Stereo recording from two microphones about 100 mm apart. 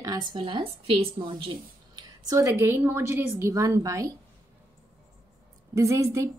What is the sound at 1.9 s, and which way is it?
Speech, 35° right (ahead or behind).